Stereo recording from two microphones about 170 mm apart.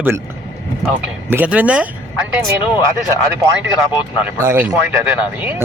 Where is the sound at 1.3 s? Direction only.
10° right (ahead or behind).